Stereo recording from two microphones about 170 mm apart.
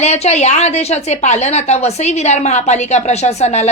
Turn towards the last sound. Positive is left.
turn(degrees=40)  # may be behind; listen again after turning